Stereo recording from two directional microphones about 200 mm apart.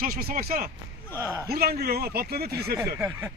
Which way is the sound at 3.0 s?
10° right (ahead or behind).